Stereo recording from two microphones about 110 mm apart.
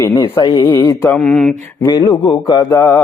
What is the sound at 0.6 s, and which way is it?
Mantra, 20° left (ahead or behind).